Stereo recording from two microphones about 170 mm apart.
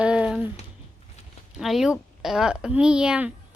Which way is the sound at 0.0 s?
5° right (ahead or behind).